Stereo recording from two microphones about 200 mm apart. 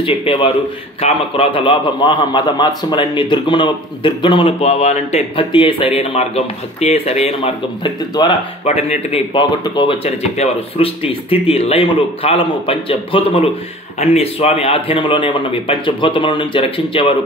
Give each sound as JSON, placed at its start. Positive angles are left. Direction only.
{"t": 0.0, "sound": "a man's voice", "side_deg": 25}